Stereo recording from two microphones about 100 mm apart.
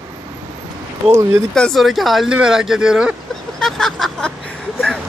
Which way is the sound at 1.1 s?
25° right (ahead or behind).